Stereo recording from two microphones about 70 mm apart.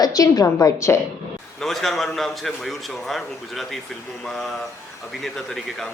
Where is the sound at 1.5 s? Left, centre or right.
Centre.